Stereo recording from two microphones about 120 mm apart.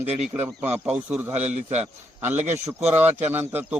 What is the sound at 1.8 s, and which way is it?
A man's voice, 15° right (ahead or behind).